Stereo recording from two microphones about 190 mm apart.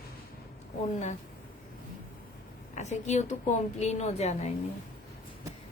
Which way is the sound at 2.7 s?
40° left (ahead or behind).